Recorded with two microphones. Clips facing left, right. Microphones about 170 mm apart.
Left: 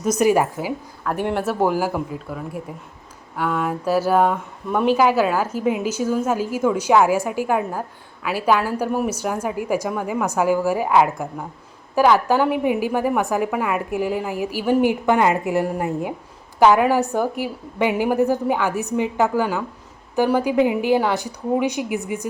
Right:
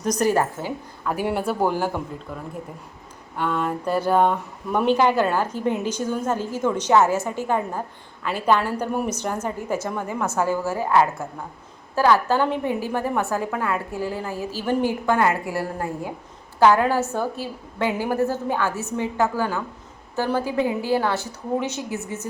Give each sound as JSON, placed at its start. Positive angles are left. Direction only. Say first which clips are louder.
{"t": 0.0, "sound": "speech", "louder": "left 3 dB", "side_deg": 10}
{"t": 1.1, "sound": "speech", "louder": "left 2 dB", "side_deg": -5}